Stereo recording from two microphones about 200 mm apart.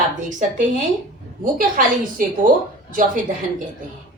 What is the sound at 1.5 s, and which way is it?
Speech, 45° right (ahead or behind).